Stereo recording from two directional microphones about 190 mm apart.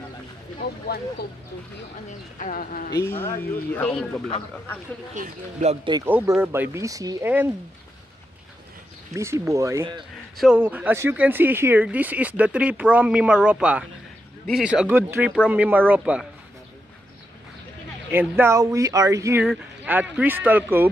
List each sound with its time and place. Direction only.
0.9 s speech: 55° left (ahead or behind)
2.3 s speech: 45° left (ahead or behind)
2.9 s speech: 15° left (ahead or behind)
5.1 s speech: 40° right (ahead or behind)
6.0 s speech: 10° right (ahead or behind)
9.1 s speech: 15° right (ahead or behind)
10.3 s a man's voice: centre (ahead or behind)
18.1 s speech: 10° right (ahead or behind)
19.4 s speech: 5° right (ahead or behind)